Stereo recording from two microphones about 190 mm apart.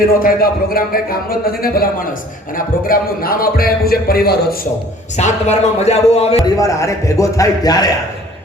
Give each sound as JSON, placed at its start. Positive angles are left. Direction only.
{"t": 0.2, "sound": "a man's voice", "side_deg": 50}
{"t": 5.1, "sound": "speech", "side_deg": 35}
{"t": 6.4, "sound": "a man's voice", "side_deg": 15}